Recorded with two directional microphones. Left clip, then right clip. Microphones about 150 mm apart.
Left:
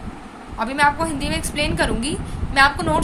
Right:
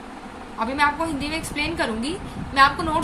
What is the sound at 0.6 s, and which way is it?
A woman's voice, 55° left (ahead or behind).